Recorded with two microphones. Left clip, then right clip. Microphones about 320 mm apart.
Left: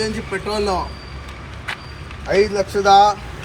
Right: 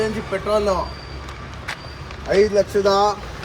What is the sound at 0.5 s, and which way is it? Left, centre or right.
Speech, centre.